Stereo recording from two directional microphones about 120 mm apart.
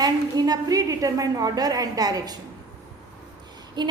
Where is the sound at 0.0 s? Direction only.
35° right (ahead or behind).